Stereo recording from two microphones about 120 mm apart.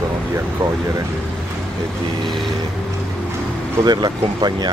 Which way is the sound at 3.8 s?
35° right (ahead or behind).